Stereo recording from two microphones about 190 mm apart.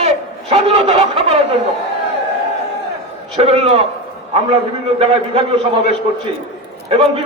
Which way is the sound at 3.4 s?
30° right (ahead or behind).